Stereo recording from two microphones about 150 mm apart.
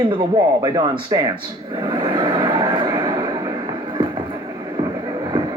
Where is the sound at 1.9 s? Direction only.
25° right (ahead or behind).